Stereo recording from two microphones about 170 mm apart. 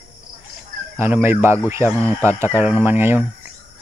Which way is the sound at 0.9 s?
15° right (ahead or behind).